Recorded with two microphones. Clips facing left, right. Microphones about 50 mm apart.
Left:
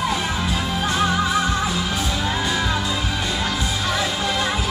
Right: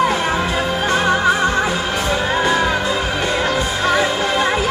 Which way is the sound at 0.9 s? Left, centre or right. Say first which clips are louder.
Right 5 dB; right.